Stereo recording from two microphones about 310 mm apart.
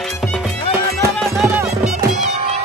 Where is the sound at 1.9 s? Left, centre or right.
Right.